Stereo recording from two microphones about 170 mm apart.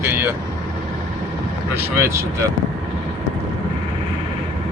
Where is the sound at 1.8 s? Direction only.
15° right (ahead or behind).